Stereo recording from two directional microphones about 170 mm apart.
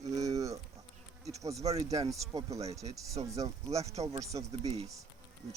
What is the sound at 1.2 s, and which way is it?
Bee, 20° right (ahead or behind).